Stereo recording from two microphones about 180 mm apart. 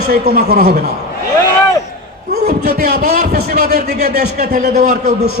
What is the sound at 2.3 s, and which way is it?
A man's voice, 55° right (ahead or behind).